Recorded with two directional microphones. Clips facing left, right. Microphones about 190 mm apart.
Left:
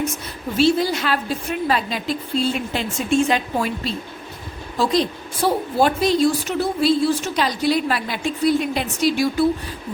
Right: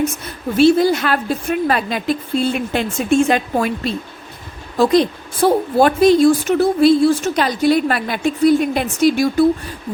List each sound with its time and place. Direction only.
0.5 s a woman's voice: 55° right (ahead or behind)